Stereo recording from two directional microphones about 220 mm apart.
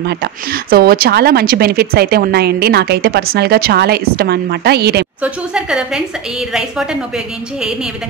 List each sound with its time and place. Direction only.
0.0 s a woman's voice: 45° right (ahead or behind)
5.2 s a woman's voice: 5° right (ahead or behind)